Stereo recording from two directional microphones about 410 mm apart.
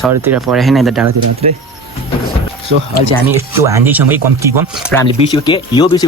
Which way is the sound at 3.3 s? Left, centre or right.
Centre.